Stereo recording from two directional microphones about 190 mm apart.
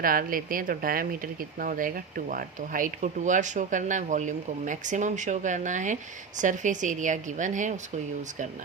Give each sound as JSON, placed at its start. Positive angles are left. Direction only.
{"t": 0.0, "sound": "speech", "side_deg": -50}